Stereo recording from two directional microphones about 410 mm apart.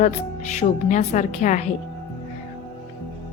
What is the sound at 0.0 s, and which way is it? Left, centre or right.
A woman's voice, centre.